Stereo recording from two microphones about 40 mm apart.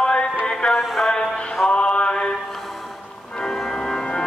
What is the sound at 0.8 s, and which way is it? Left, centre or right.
Music, centre.